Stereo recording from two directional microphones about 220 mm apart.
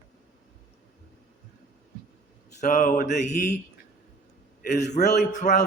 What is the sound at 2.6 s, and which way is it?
Speech, 35° left (ahead or behind).